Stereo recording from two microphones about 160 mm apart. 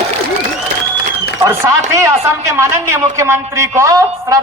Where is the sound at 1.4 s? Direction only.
20° right (ahead or behind).